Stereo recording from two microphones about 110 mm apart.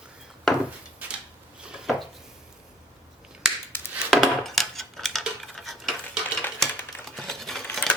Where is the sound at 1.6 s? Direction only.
5° right (ahead or behind).